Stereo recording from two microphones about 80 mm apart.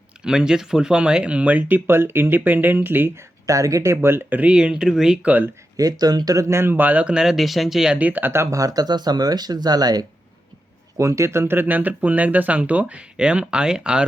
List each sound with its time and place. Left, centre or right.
0.3 s speech: centre; by 3.1 s right
3.4 s speech: right
3.9 s speech: right
4.5 s speech: centre
5.7 s speech: right; by 7.9 s centre
7.9 s speech: centre; by 10.1 s right
10.9 s speech: right; by 14.0 s centre